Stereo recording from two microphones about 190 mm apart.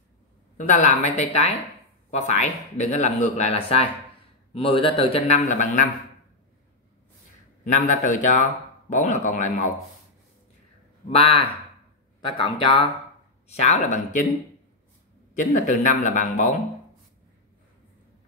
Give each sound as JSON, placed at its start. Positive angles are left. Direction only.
{"t": 0.6, "sound": "a man's voice", "side_deg": 40}
{"t": 7.6, "sound": "speech", "side_deg": 40}
{"t": 11.1, "sound": "a man's voice", "side_deg": 30}
{"t": 13.5, "sound": "speech", "side_deg": 40}
{"t": 15.3, "sound": "speech", "side_deg": 40}